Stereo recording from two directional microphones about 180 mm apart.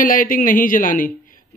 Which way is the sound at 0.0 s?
50° left (ahead or behind).